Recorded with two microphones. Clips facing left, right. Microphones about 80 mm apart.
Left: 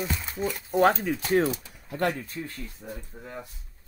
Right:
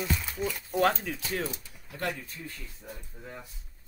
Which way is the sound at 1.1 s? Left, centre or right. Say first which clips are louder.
Left 10 dB; left.